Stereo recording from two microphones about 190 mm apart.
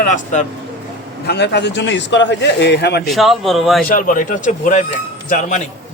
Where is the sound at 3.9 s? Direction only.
45° left (ahead or behind).